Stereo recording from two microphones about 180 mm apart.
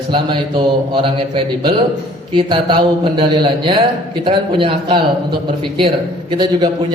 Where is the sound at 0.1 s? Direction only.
30° right (ahead or behind).